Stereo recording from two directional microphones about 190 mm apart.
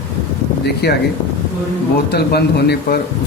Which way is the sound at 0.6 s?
60° left (ahead or behind).